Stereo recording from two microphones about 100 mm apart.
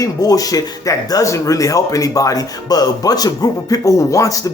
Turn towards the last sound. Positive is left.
turn(degrees=35)  # may be behind; listen again after turning